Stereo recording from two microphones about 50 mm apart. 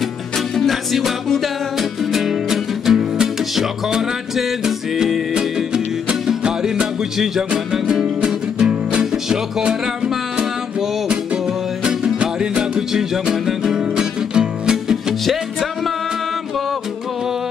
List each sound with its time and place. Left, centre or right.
0.6 s music: centre; by 10.4 s right
11.8 s music: centre